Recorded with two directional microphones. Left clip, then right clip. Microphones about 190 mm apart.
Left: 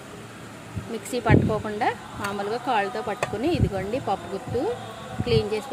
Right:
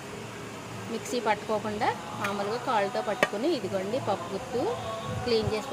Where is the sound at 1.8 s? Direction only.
40° left (ahead or behind).